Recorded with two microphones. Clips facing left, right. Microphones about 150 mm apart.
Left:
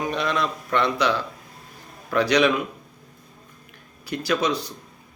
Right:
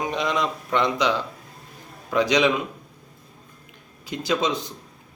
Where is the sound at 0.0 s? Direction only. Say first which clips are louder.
Even; 15° right (ahead or behind).